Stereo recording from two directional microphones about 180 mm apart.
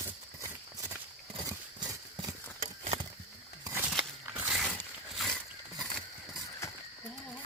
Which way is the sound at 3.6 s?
10° right (ahead or behind).